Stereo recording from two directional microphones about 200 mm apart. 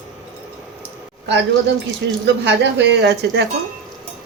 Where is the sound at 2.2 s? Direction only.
60° right (ahead or behind).